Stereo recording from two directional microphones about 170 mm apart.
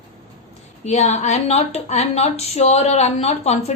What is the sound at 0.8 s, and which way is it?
A woman's voice, 45° left (ahead or behind).